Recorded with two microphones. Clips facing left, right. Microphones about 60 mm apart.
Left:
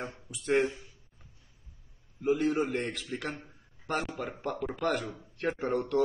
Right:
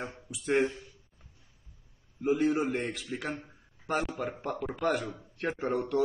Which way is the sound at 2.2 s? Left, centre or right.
Centre.